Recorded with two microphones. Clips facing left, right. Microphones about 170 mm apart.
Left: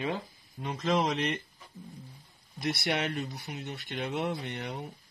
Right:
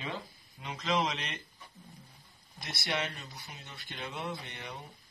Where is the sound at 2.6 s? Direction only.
60° left (ahead or behind).